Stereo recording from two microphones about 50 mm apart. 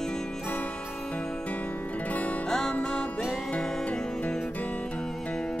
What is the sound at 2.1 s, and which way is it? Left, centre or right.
Music, left.